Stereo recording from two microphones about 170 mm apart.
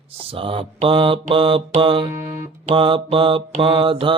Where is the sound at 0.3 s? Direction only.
30° right (ahead or behind).